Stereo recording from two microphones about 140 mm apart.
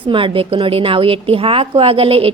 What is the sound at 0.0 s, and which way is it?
A woman's voice, 40° right (ahead or behind).